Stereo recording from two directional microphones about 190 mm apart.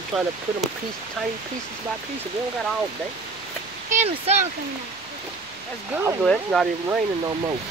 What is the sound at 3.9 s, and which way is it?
Speech, 35° right (ahead or behind).